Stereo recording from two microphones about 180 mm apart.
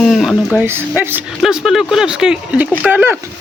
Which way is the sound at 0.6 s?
10° right (ahead or behind).